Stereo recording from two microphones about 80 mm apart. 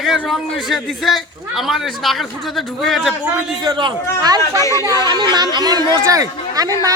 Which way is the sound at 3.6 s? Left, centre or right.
Right.